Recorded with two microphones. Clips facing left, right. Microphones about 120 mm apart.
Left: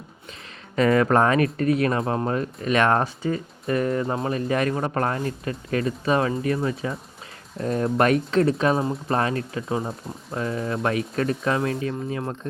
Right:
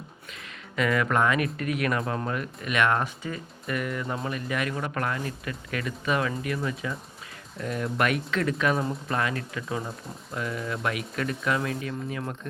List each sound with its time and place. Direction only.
0.8 s speech: 35° left (ahead or behind)